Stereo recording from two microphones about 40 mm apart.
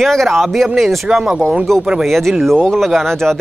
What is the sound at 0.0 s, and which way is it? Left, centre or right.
Speech, centre.